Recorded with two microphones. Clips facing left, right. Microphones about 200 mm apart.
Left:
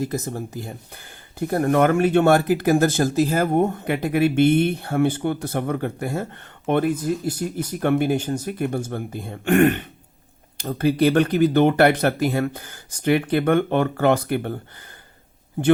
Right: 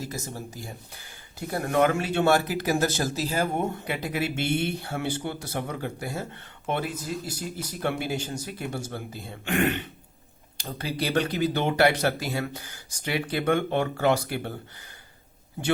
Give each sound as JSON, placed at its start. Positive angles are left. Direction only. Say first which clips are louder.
{"t": 0.0, "sound": "speech", "louder": "left 9 dB", "side_deg": 55}